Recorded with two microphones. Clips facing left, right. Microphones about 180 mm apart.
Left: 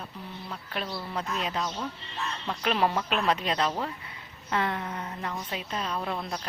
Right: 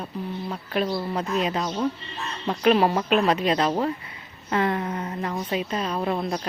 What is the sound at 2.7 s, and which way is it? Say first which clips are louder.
Speech: right 5 dB; 40° right (ahead or behind).